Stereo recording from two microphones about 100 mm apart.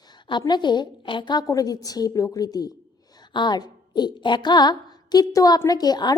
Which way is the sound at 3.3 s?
50° left (ahead or behind).